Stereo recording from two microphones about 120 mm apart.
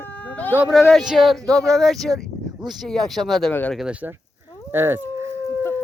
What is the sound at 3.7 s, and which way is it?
Speech, 5° right (ahead or behind).